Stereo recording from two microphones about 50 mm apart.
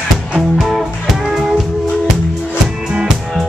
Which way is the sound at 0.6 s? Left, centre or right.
Centre.